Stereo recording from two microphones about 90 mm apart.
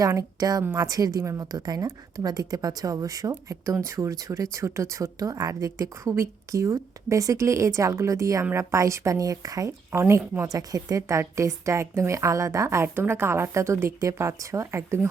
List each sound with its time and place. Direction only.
0.2 s a woman's voice: 45° right (ahead or behind)